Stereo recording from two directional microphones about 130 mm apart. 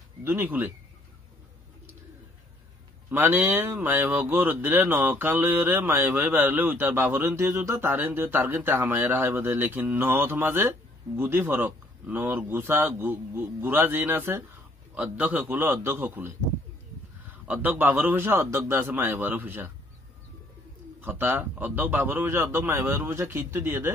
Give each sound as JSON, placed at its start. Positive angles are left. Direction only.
{"t": 0.2, "sound": "speech", "side_deg": -15}
{"t": 3.1, "sound": "speech", "side_deg": -15}
{"t": 21.0, "sound": "speech", "side_deg": -15}